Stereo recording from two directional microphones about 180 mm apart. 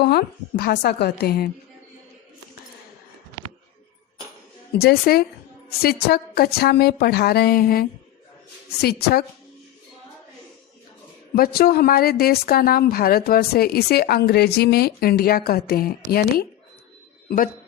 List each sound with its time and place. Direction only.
0.0 s a woman's voice: 60° left (ahead or behind)
4.7 s a woman's voice: 60° left (ahead or behind)
11.3 s a woman's voice: 55° left (ahead or behind)